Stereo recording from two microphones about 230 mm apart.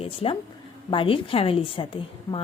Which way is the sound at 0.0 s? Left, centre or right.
Left.